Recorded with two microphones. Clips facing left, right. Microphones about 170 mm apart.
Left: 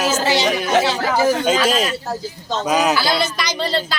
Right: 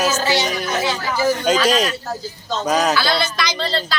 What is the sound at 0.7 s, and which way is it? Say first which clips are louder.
Speech: left 6 dB; 90° left.